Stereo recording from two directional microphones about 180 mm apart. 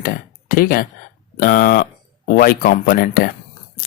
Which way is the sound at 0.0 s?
55° left (ahead or behind).